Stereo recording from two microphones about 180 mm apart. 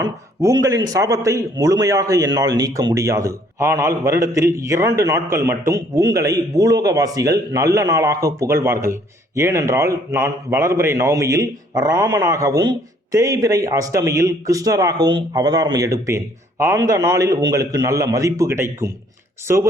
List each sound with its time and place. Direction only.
0.0 s a man's voice: 20° right (ahead or behind)